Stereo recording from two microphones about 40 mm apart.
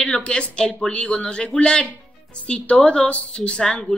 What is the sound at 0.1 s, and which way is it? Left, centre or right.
A woman's voice, left.